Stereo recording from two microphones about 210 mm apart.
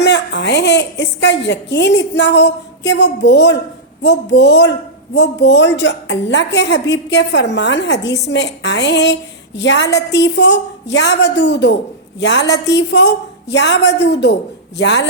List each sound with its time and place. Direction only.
0.0 s a woman's voice: 55° left (ahead or behind)